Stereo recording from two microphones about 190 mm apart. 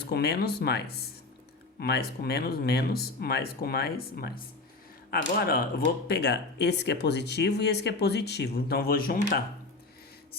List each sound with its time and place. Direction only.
0.0 s speech: 60° left (ahead or behind)